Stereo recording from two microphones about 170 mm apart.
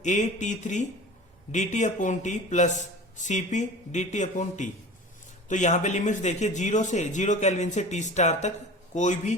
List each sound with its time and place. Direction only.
0.0 s a man's voice: 45° left (ahead or behind)